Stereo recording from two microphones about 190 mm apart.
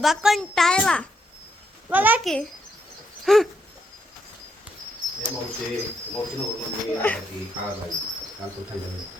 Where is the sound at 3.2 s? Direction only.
Centre (ahead or behind).